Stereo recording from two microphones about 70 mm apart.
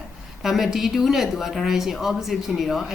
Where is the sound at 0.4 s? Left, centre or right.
Centre.